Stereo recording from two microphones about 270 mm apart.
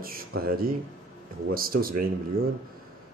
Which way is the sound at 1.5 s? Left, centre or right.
Right.